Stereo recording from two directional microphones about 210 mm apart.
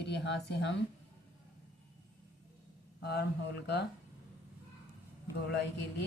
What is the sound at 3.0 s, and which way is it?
Speech, 50° left (ahead or behind).